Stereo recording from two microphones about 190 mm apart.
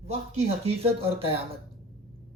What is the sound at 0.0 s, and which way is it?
Speech, 35° right (ahead or behind).